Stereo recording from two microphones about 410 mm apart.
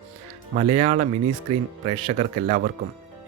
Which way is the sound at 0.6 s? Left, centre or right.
Centre.